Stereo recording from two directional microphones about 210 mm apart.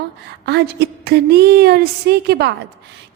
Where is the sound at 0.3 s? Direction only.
50° right (ahead or behind).